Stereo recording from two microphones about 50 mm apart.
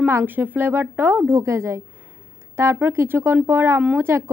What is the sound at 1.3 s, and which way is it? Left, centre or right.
Speech, right.